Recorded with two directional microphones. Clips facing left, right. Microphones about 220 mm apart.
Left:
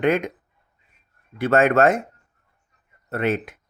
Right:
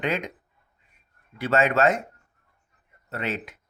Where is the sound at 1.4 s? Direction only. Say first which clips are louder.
Left 5 dB; 55° left (ahead or behind).